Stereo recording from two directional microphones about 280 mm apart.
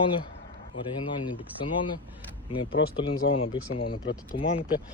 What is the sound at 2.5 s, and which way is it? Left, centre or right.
Speech, centre.